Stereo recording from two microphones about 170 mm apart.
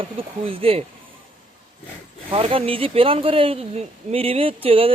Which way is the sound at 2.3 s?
30° right (ahead or behind).